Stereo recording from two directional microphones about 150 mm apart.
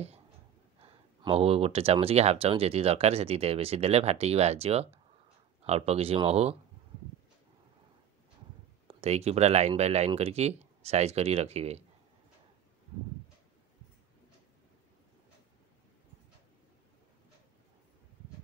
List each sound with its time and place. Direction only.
1.2 s speech: 40° right (ahead or behind)
9.0 s speech: 45° right (ahead or behind)